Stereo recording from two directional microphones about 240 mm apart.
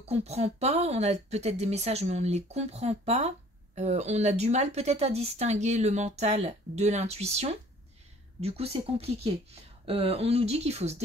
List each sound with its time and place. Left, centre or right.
0.0 s a woman's voice: right